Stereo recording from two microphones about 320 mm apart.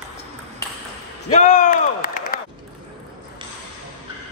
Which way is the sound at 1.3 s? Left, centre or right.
Left.